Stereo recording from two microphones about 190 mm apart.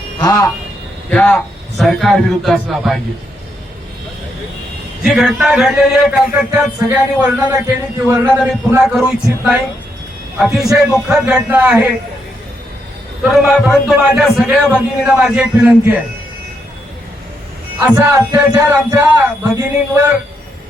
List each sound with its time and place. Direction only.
0.2 s speech: 20° left (ahead or behind)
1.1 s a man's voice: 5° left (ahead or behind)
5.0 s a man's voice: 5° right (ahead or behind)
8.8 s a man's voice: centre (ahead or behind)
13.2 s a man's voice: centre (ahead or behind)
17.7 s speech: 15° right (ahead or behind)